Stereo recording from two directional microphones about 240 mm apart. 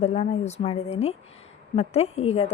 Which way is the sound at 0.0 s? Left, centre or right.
Left.